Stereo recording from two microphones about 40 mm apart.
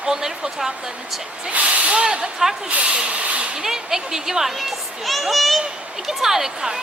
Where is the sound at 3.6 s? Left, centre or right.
Centre.